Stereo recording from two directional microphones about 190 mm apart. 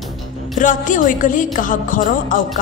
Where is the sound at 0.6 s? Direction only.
45° left (ahead or behind).